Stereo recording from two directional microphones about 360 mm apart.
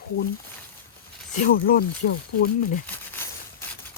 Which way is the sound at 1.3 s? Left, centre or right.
Left.